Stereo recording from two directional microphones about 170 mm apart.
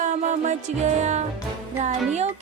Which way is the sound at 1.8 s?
40° right (ahead or behind).